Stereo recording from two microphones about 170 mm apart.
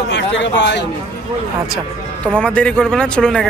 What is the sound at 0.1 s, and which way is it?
Speech, 90° left.